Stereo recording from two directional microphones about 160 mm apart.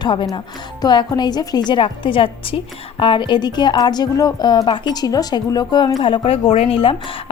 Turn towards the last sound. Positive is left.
turn(degrees=35)  # may be behind; listen again after turning